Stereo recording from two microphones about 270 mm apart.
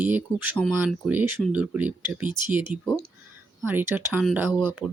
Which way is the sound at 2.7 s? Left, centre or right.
Right.